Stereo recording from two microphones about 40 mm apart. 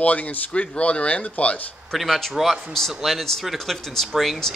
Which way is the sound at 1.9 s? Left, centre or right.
Centre.